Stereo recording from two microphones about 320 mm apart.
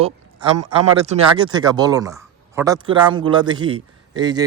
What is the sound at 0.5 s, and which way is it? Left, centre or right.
Speech, right.